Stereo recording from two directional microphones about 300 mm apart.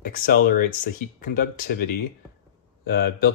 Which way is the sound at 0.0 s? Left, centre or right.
Left.